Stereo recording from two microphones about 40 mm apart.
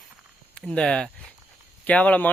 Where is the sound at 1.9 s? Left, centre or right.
Left.